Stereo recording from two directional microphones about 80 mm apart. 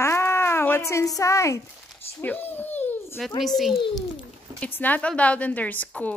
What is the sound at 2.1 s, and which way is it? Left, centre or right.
A woman's voice, left.